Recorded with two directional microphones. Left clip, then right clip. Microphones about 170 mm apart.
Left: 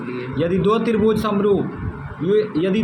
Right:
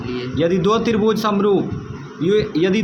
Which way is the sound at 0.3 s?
30° right (ahead or behind).